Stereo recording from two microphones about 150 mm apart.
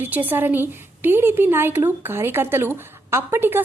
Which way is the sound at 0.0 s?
10° right (ahead or behind).